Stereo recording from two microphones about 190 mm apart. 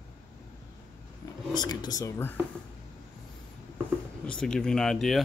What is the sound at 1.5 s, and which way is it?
Speech, 20° left (ahead or behind).